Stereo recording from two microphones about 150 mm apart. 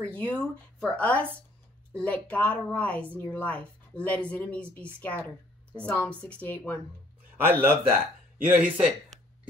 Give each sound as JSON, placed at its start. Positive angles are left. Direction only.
{"t": 0.0, "sound": "a woman's voice", "side_deg": 10}
{"t": 7.4, "sound": "a man's voice", "side_deg": -15}